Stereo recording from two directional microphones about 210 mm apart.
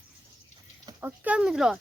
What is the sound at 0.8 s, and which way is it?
Speech, 15° right (ahead or behind).